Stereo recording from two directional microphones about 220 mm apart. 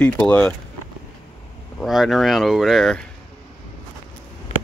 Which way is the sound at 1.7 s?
Centre (ahead or behind).